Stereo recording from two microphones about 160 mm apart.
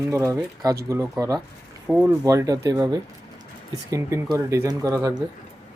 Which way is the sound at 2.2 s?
20° right (ahead or behind).